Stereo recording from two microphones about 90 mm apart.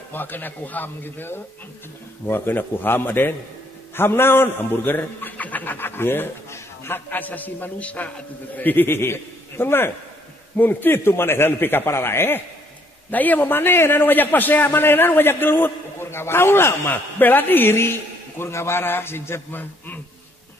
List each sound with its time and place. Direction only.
0.1 s a man's voice: 20° left (ahead or behind)